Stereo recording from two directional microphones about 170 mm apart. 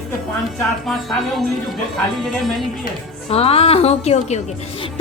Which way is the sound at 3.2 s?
35° left (ahead or behind).